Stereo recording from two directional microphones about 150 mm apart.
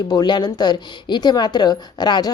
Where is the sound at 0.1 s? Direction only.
25° left (ahead or behind).